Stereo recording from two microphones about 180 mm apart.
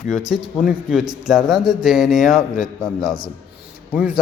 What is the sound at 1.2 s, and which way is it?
A man's voice, centre (ahead or behind).